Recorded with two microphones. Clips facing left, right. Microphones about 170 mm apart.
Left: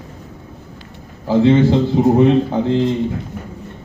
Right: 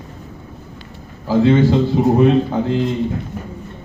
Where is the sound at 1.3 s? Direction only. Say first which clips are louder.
Left 1 dB; 20° left (ahead or behind).